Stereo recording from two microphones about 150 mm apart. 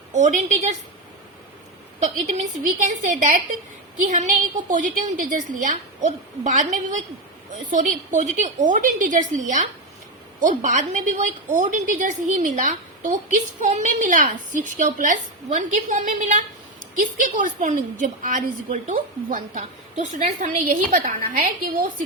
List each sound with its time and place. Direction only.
0.1 s a woman's voice: 55° right (ahead or behind)
2.0 s a woman's voice: 50° right (ahead or behind); by 21.8 s 65° right (ahead or behind)